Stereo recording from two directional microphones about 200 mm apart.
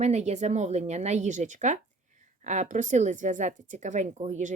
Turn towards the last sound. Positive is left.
turn(degrees=-35)  # may be behind; listen again after turning